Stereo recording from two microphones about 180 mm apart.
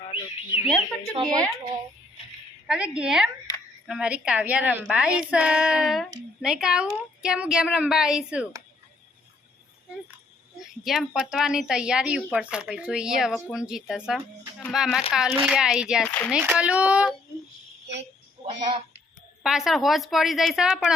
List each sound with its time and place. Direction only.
0.1 s bird: 30° left (ahead or behind)
1.1 s a woman's voice: 20° right (ahead or behind)
2.6 s a woman's voice: 5° right (ahead or behind)
10.8 s a woman's voice: centre (ahead or behind)
16.0 s speech: 10° left (ahead or behind)
16.3 s speech: 5° right (ahead or behind)
19.4 s a woman's voice: 5° right (ahead or behind)